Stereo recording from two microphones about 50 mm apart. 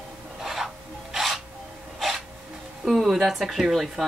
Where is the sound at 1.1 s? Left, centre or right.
Centre.